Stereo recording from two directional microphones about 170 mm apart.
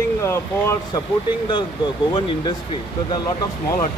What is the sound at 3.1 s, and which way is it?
Speech, 25° left (ahead or behind).